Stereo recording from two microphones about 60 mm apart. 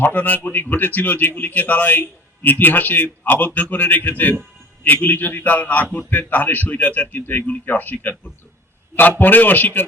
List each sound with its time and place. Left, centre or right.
0.0 s a man's voice: left